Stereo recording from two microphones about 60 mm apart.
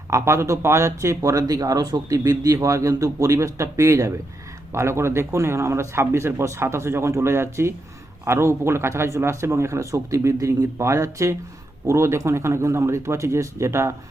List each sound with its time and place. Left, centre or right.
0.1 s speech: right